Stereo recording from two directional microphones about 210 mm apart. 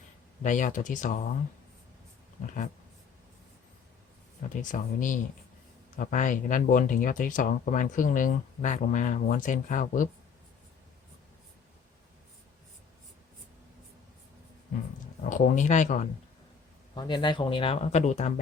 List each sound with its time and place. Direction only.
0.4 s speech: 35° left (ahead or behind)
4.4 s speech: 40° left (ahead or behind)
15.2 s speech: 40° left (ahead or behind)
16.9 s speech: 20° left (ahead or behind)